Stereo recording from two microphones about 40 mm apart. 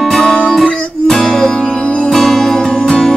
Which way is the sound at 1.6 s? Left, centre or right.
Left.